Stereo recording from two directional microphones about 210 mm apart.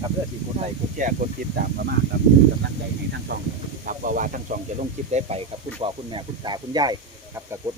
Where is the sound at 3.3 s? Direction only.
50° right (ahead or behind).